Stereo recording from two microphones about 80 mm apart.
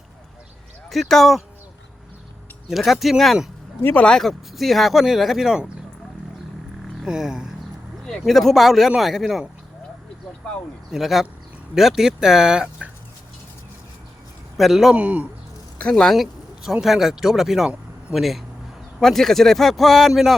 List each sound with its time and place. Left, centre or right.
0.9 s speech: centre
2.6 s speech: centre
7.0 s speech: centre
8.0 s speech: centre
10.9 s speech: centre
14.6 s speech: centre
14.9 s speech: centre
15.8 s speech: centre